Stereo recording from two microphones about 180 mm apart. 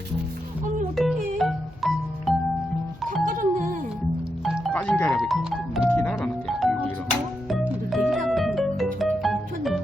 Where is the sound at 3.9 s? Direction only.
5° right (ahead or behind).